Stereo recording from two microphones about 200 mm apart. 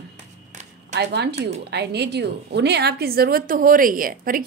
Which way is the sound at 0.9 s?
60° right (ahead or behind).